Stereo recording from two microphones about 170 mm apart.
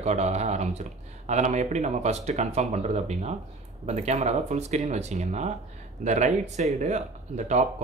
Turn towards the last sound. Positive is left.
turn(degrees=-40)  # may be behind; listen again after turning